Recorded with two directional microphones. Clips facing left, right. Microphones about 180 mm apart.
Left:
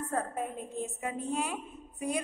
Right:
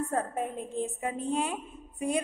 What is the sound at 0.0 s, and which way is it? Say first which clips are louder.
A woman's voice: right 3 dB; 25° right (ahead or behind).